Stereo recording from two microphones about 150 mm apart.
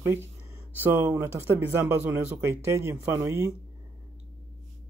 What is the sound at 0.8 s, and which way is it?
Speech, 15° right (ahead or behind).